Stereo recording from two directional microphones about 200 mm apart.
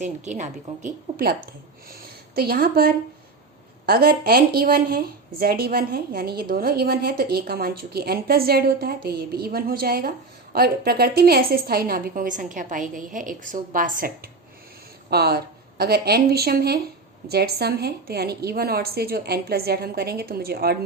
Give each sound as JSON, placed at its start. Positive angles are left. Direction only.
{"t": 0.0, "sound": "a woman's voice", "side_deg": -35}